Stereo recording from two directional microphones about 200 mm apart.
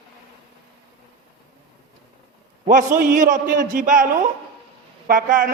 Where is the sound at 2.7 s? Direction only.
40° right (ahead or behind).